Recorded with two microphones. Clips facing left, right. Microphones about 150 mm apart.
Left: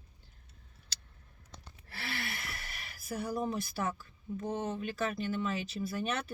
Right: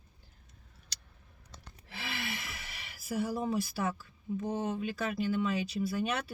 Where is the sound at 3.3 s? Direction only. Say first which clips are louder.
Right 2 dB; 5° right (ahead or behind).